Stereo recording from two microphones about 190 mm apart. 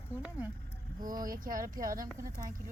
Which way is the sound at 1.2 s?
45° right (ahead or behind).